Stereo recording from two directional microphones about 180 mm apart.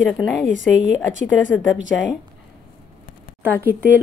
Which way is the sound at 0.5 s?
90° left.